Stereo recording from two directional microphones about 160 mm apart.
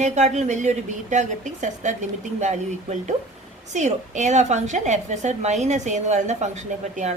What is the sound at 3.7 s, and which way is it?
A woman's voice, 50° right (ahead or behind).